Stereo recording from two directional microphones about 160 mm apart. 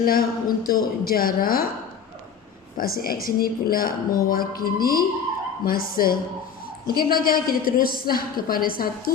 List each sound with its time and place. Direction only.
0.0 s a woman's voice: 65° left (ahead or behind)
2.7 s a woman's voice: 65° left (ahead or behind)